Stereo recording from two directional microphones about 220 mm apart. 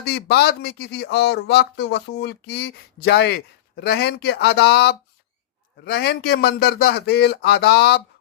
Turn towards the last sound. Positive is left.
turn(degrees=45)  # may be behind; listen again after turning